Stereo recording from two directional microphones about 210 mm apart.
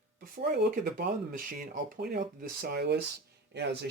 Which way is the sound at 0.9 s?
45° right (ahead or behind).